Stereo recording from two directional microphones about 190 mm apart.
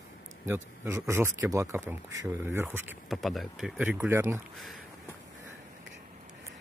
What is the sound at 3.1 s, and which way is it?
Speech, centre (ahead or behind).